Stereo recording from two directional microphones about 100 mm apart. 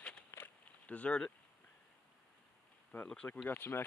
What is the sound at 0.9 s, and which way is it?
Speech, 15° left (ahead or behind).